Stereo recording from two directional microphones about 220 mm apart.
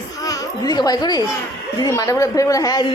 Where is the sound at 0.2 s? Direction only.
15° left (ahead or behind).